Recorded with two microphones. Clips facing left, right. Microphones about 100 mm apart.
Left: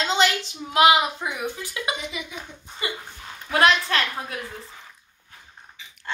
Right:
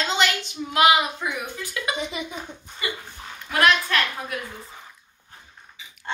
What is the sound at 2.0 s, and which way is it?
Speech, 35° right (ahead or behind).